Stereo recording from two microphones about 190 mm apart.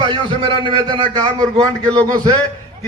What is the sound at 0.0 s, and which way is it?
A man's voice, 25° right (ahead or behind).